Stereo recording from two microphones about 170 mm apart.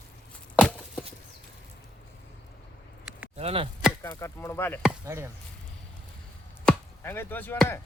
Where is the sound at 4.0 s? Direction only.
15° left (ahead or behind).